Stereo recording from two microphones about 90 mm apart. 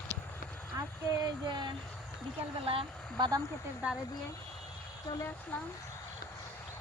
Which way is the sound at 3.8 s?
15° right (ahead or behind).